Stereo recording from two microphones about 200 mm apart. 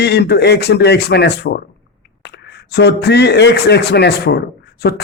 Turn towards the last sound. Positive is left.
turn(degrees=55)  # may be behind; listen again after turning